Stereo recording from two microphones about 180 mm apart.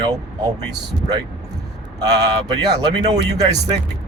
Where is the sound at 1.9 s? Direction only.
20° right (ahead or behind).